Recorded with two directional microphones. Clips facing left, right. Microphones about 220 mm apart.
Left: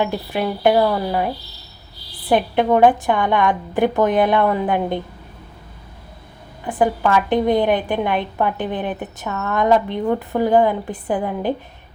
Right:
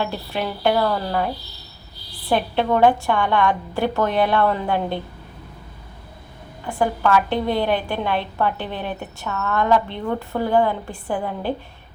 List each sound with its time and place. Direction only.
0.0 s a woman's voice: 15° left (ahead or behind)
2.3 s a woman's voice: 15° left (ahead or behind)
6.7 s a woman's voice: 15° left (ahead or behind)